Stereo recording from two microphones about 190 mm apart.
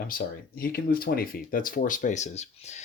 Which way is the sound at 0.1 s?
50° left (ahead or behind).